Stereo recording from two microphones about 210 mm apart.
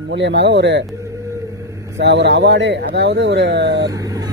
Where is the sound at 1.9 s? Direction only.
55° right (ahead or behind).